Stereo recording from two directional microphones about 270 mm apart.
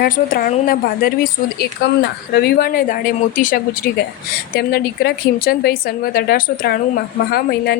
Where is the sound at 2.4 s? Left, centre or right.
Left.